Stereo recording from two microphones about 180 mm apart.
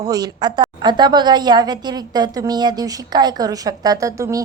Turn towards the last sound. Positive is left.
turn(degrees=-20)  # may be behind; listen again after turning